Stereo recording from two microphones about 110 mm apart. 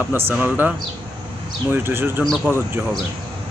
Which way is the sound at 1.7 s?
20° right (ahead or behind).